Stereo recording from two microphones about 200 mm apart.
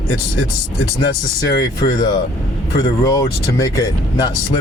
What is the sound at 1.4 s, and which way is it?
Speech, 20° left (ahead or behind).